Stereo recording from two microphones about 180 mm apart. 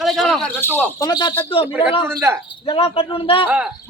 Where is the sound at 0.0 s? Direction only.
Centre (ahead or behind).